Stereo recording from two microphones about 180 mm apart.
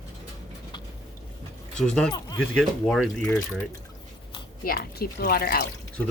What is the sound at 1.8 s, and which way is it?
Speech, 5° left (ahead or behind).